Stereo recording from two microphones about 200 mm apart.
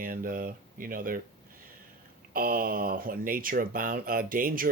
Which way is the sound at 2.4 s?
45° right (ahead or behind).